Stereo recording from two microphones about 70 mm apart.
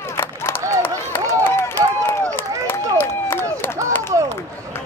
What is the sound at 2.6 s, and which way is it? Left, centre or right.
Run, left.